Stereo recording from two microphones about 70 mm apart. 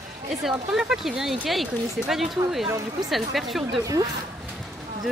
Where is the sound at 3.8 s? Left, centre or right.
Right.